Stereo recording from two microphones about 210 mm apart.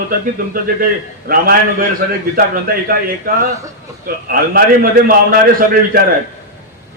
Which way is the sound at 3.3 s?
45° right (ahead or behind).